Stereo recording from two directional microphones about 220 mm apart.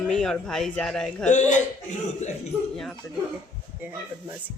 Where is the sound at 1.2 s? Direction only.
35° left (ahead or behind).